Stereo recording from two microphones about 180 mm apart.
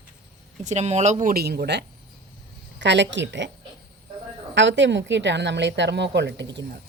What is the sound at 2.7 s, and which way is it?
Speech, 80° right.